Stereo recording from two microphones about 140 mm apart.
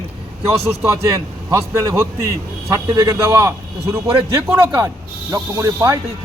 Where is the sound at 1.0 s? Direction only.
25° right (ahead or behind).